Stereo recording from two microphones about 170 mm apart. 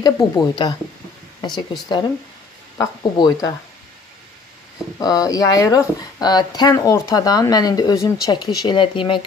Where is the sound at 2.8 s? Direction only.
25° left (ahead or behind).